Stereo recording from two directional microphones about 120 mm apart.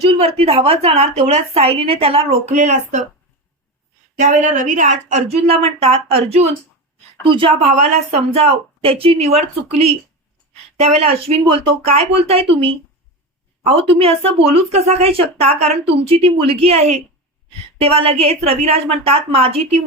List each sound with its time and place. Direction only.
0.0 s a woman's voice: 55° right (ahead or behind)
2.6 s speech: 90° right
4.2 s a woman's voice: 90° right; by 6.5 s 60° right (ahead or behind)
7.3 s a woman's voice: 45° right (ahead or behind)
7.9 s a woman's voice: 65° right (ahead or behind)
17.7 s a woman's voice: 55° right (ahead or behind)